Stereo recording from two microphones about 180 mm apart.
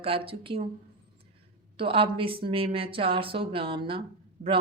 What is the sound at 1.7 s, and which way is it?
Speech, 30° right (ahead or behind).